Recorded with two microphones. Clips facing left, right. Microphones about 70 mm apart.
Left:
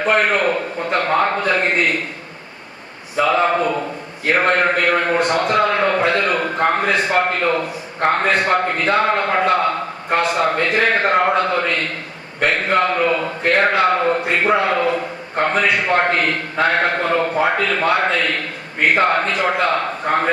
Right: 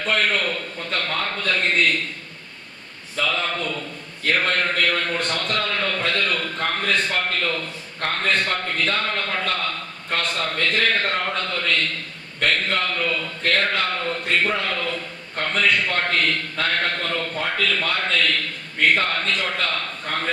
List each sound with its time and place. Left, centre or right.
0.0 s a man's voice: left
3.2 s a man's voice: left
12.4 s a sound: left
14.2 s a man's voice: left